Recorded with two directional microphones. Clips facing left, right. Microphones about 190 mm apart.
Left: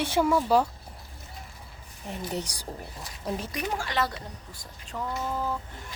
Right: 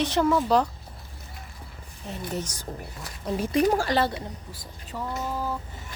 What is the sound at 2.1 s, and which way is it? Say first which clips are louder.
Speech: right 1 dB; 15° left (ahead or behind).